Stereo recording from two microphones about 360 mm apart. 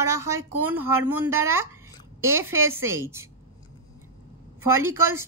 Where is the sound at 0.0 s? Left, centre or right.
Centre.